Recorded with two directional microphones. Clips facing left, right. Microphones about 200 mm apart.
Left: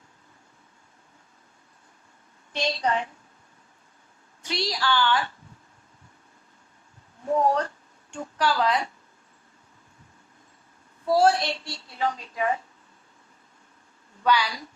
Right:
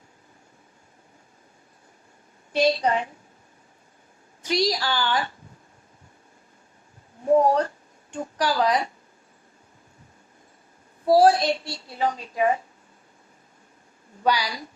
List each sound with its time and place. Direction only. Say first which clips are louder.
2.6 s child singing: right 6 dB; 35° right (ahead or behind)
4.4 s child singing: right 4 dB; 40° right (ahead or behind)
7.3 s child singing: right 4 dB; 35° right (ahead or behind)
11.0 s child singing: right 4 dB; 35° right (ahead or behind)
14.3 s child singing: even; 40° right (ahead or behind)